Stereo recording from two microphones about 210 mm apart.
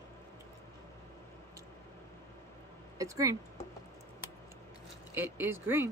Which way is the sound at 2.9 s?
15° right (ahead or behind).